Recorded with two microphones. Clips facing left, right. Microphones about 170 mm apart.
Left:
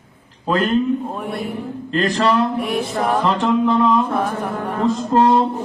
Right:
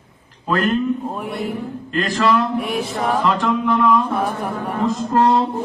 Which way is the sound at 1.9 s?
35° left (ahead or behind).